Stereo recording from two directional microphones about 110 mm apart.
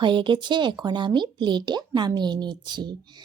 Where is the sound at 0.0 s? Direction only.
45° right (ahead or behind).